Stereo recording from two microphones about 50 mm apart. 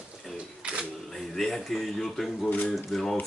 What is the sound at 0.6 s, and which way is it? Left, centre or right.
Camera, centre.